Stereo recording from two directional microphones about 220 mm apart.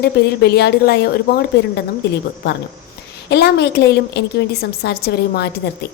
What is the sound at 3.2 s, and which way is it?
A woman's voice, 50° left (ahead or behind).